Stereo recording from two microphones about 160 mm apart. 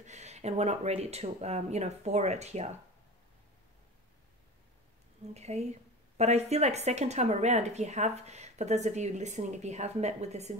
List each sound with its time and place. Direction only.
0.0 s speech: 45° right (ahead or behind)
5.3 s speech: 45° right (ahead or behind)